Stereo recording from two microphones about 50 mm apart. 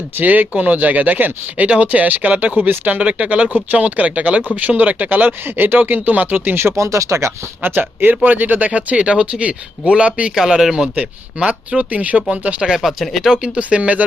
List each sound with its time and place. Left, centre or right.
0.2 s speech: right
6.7 s speech: right
7.6 s speech: right
10.3 s speech: centre
10.9 s speech: right
12.6 s speech: centre
13.4 s speech: right